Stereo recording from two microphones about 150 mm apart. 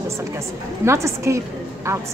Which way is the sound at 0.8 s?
20° right (ahead or behind).